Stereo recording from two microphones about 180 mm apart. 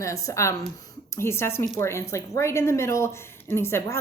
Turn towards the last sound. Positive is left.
turn(degrees=15)  # may be behind; listen again after turning